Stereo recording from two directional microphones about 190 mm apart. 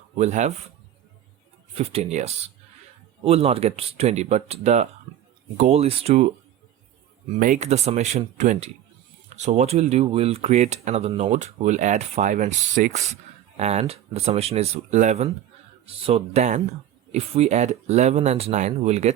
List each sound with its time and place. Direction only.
0.2 s speech: 35° right (ahead or behind)
1.7 s speech: 35° right (ahead or behind)
7.3 s speech: 45° right (ahead or behind)